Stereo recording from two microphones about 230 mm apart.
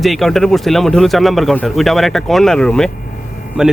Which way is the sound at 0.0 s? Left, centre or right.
Centre.